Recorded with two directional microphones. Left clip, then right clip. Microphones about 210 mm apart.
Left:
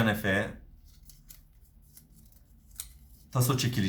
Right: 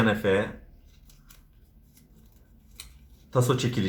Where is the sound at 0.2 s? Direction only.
40° left (ahead or behind).